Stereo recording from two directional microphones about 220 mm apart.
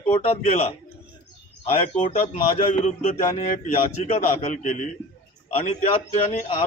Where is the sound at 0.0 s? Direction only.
25° left (ahead or behind).